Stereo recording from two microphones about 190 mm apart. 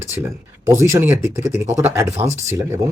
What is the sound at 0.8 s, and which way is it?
Speech, 15° right (ahead or behind).